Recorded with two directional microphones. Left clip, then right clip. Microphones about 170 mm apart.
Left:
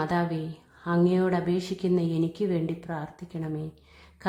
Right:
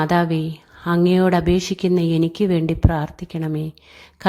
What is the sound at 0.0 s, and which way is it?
A woman's voice, 40° right (ahead or behind).